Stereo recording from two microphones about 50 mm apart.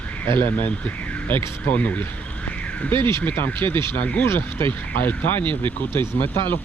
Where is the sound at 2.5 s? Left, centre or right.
Left.